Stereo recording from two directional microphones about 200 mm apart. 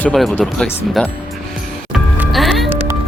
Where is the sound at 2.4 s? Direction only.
Centre (ahead or behind).